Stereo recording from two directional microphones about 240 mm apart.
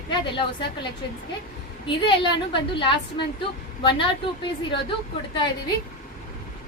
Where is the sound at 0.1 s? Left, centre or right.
Left.